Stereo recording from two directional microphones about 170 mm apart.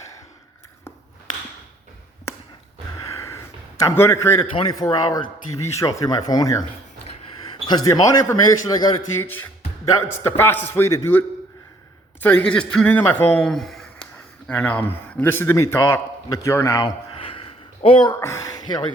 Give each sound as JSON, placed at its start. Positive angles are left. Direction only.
{"t": 3.1, "sound": "a sound", "side_deg": 15}
{"t": 4.5, "sound": "a man's voice", "side_deg": 25}
{"t": 7.7, "sound": "a man's voice", "side_deg": 25}
{"t": 9.2, "sound": "a man's voice", "side_deg": 10}
{"t": 12.2, "sound": "speech", "side_deg": 5}
{"t": 17.2, "sound": "a sound", "side_deg": 35}